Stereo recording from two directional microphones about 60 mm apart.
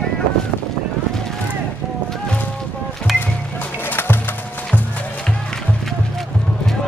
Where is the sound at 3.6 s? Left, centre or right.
Left.